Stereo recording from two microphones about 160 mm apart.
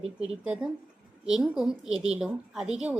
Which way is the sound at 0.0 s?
40° right (ahead or behind).